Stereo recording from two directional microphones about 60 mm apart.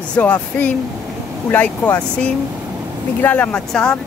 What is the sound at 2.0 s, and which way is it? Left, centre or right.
Speech, left.